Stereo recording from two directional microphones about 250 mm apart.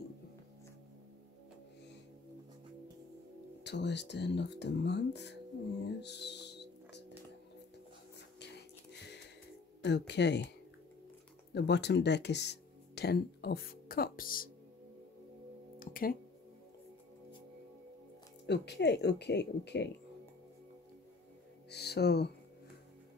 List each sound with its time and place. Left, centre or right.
3.6 s speech: left
5.9 s music: left
9.8 s speech: left
11.5 s speech: left
15.8 s a sound: left
18.5 s speech: left
21.6 s music: left